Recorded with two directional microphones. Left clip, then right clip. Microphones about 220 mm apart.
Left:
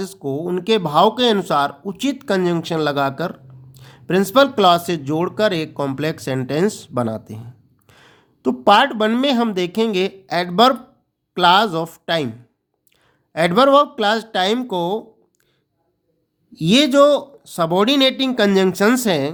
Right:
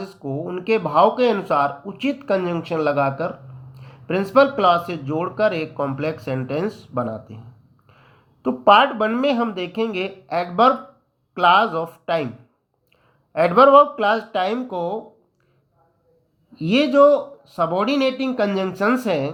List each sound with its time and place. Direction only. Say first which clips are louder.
0.0 s speech: left 4 dB; 40° left (ahead or behind)
13.3 s speech: right 1 dB; 30° left (ahead or behind)
16.6 s speech: left 2 dB; 35° left (ahead or behind)